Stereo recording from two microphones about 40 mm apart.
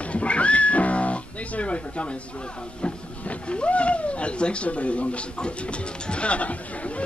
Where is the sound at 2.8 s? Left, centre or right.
Left.